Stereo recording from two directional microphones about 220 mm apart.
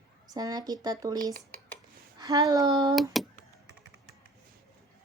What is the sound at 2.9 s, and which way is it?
Speech, centre (ahead or behind).